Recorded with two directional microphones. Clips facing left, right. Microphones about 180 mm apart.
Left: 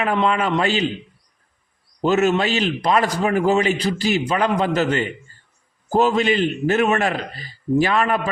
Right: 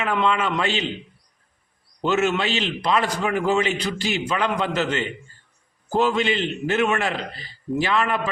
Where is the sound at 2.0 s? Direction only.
40° left (ahead or behind).